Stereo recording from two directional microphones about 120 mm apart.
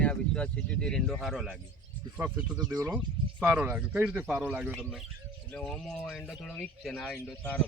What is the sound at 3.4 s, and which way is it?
Speech, 15° right (ahead or behind).